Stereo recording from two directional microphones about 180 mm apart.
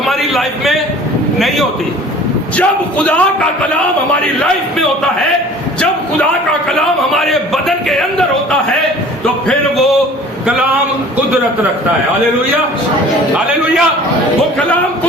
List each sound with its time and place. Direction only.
0.0 s a sound: centre (ahead or behind)
2.6 s speech: 5° left (ahead or behind)
6.7 s a man's voice: centre (ahead or behind)